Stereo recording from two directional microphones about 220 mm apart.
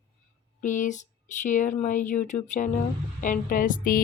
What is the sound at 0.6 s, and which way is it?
Speech, 35° left (ahead or behind).